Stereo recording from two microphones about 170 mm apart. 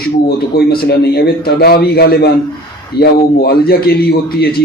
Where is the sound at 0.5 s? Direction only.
70° left (ahead or behind).